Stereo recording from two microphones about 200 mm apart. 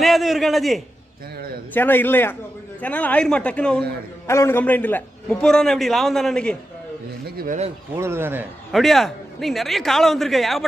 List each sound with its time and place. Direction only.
0.0 s a sound: centre (ahead or behind)
1.7 s a man's voice: 10° left (ahead or behind)
7.2 s speech: 50° right (ahead or behind)
8.0 s speech: 10° right (ahead or behind)
8.7 s a man's voice: centre (ahead or behind)